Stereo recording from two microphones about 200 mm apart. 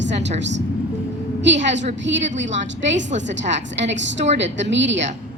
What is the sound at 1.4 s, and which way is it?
A woman's voice, 65° right (ahead or behind).